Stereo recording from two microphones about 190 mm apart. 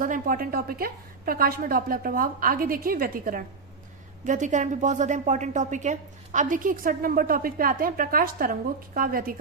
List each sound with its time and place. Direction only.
0.0 s a woman's voice: 45° right (ahead or behind)